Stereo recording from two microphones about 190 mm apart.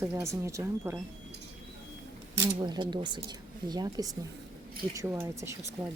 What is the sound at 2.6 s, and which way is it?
A woman's voice, 25° right (ahead or behind).